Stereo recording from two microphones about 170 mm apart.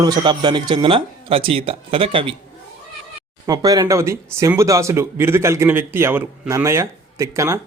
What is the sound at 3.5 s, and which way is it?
Speech, 20° right (ahead or behind).